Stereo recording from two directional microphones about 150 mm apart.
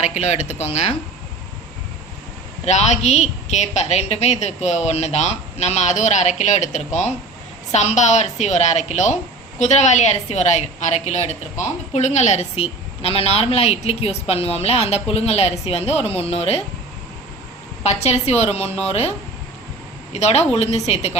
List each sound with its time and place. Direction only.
0.0 s a woman's voice: 50° left (ahead or behind)
2.6 s a woman's voice: 50° left (ahead or behind)
17.8 s a woman's voice: 45° left (ahead or behind)
20.1 s a woman's voice: 45° left (ahead or behind)